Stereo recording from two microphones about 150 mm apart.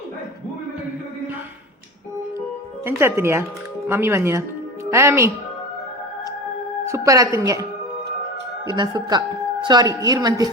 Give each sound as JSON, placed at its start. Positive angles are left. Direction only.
{"t": 2.8, "sound": "speech", "side_deg": -15}
{"t": 6.8, "sound": "a woman's voice", "side_deg": -20}
{"t": 8.6, "sound": "a woman's voice", "side_deg": -30}